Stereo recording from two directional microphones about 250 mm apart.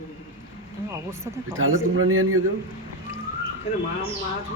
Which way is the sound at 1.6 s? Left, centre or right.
Right.